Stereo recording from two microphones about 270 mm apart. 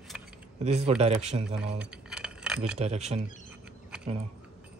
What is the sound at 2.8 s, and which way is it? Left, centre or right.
Speech, right.